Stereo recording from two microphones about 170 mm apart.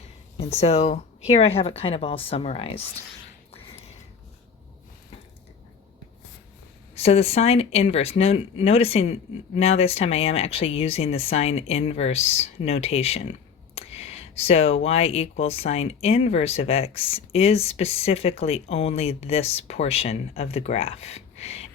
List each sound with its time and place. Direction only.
0.3 s speech: 40° left (ahead or behind)
6.9 s speech: 35° left (ahead or behind)